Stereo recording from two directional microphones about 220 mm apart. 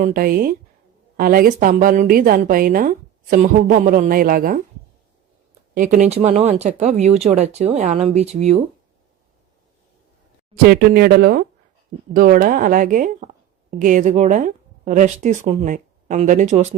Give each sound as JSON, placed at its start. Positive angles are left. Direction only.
{"t": 0.0, "sound": "a woman's voice", "side_deg": -40}
{"t": 5.7, "sound": "a woman's voice", "side_deg": -40}
{"t": 10.7, "sound": "a woman's voice", "side_deg": -45}